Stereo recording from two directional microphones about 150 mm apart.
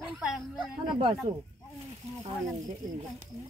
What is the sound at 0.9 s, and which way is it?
Speech, 30° right (ahead or behind).